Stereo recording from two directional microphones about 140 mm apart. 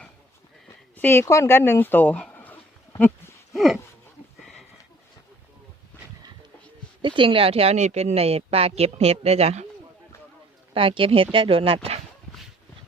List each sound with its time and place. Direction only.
0.9 s speech: 15° left (ahead or behind)
3.5 s a sound: centre (ahead or behind)
7.0 s speech: 35° right (ahead or behind)
10.8 s speech: 40° right (ahead or behind)